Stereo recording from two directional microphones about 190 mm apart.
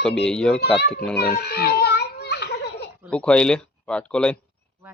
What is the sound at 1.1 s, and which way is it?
Children playing, 55° left (ahead or behind).